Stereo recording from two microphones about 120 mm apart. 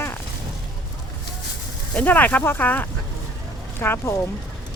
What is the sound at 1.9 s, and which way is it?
Speech, 15° left (ahead or behind).